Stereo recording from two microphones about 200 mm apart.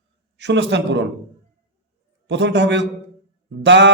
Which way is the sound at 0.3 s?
60° right (ahead or behind).